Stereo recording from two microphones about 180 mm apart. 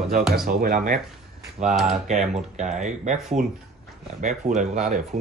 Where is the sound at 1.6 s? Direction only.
40° right (ahead or behind).